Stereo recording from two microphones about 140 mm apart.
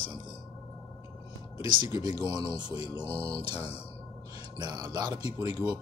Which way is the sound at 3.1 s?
45° left (ahead or behind).